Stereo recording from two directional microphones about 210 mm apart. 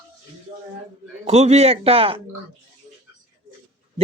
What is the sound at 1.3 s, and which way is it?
Speech, 30° right (ahead or behind).